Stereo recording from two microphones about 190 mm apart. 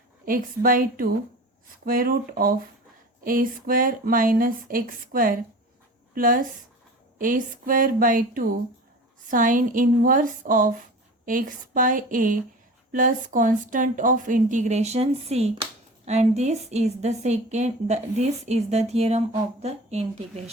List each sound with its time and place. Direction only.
0.3 s a woman's voice: 50° right (ahead or behind)